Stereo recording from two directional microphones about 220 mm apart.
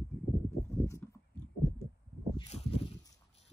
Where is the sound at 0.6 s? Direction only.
10° left (ahead or behind).